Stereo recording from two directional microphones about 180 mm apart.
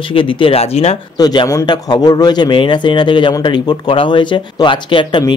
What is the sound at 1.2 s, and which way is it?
Speech, 20° left (ahead or behind).